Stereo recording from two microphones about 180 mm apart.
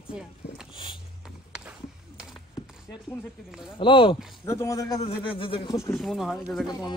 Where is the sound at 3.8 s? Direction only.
30° left (ahead or behind).